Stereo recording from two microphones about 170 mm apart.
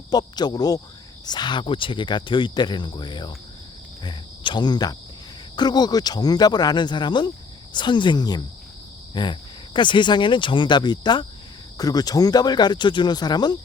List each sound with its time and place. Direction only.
0.1 s speech: 25° left (ahead or behind)
4.0 s cricket: 25° left (ahead or behind)
5.5 s speech: 25° left (ahead or behind)